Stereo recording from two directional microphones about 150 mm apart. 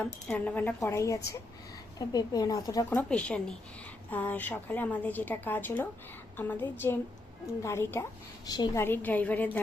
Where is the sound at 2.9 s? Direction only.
10° left (ahead or behind); by 8.8 s 25° left (ahead or behind).